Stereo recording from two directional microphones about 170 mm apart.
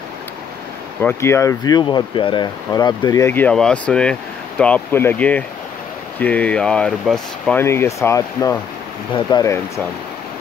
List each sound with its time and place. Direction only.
1.0 s speech: 15° left (ahead or behind)